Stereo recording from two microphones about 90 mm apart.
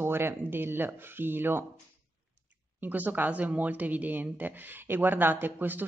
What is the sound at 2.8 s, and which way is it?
Speech, 20° right (ahead or behind).